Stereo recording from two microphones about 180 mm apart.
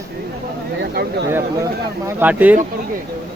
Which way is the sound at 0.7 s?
60° right (ahead or behind).